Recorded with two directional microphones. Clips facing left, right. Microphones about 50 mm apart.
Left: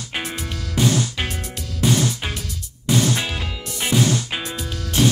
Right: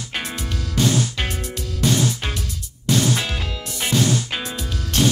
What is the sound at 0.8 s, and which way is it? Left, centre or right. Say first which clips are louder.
Music: even; centre.